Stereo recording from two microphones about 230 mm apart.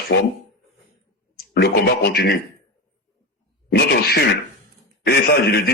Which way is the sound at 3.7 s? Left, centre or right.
Left.